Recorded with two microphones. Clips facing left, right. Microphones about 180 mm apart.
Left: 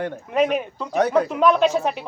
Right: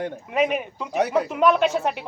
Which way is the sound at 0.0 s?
10° right (ahead or behind).